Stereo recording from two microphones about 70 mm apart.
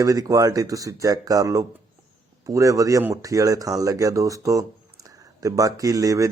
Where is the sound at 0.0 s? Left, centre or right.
Right.